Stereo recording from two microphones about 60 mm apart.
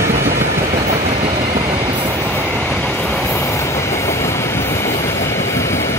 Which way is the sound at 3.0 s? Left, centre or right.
Left.